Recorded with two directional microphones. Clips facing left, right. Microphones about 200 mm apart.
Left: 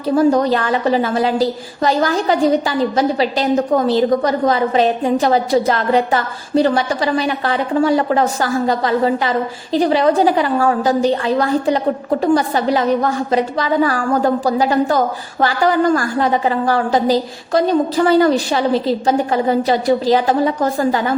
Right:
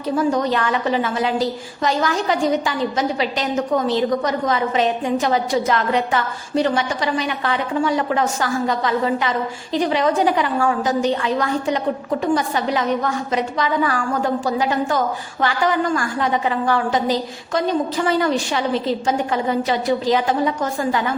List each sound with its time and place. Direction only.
0.2 s a woman's voice: 35° left (ahead or behind)